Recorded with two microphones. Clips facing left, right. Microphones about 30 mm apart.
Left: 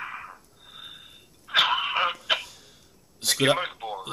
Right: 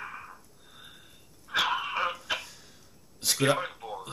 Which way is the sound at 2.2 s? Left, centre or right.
Left.